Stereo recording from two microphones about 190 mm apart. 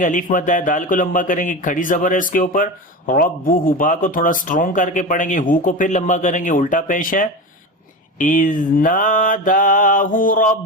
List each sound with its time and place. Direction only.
0.0 s speech: 45° left (ahead or behind)